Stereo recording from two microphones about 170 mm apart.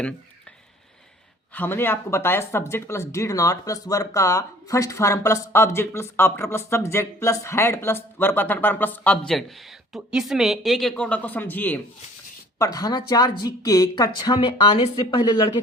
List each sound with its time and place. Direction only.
1.5 s speech: 10° left (ahead or behind)
12.5 s speech: 20° left (ahead or behind)